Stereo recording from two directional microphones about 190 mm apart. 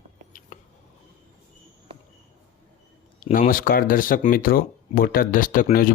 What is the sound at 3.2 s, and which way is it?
Speech, 45° left (ahead or behind).